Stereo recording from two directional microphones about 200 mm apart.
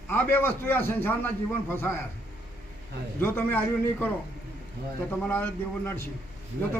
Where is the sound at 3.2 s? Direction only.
10° left (ahead or behind).